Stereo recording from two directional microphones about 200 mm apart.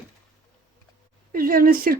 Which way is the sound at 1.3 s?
45° right (ahead or behind).